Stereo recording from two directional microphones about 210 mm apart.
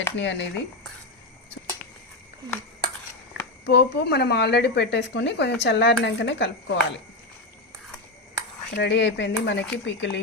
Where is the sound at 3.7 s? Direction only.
55° left (ahead or behind).